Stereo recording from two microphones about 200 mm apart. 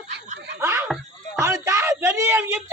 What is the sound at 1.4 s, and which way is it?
Speech, 15° right (ahead or behind).